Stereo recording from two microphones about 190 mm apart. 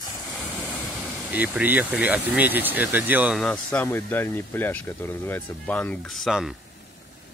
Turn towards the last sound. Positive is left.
turn(degrees=0)  # may be behind; listen again after turning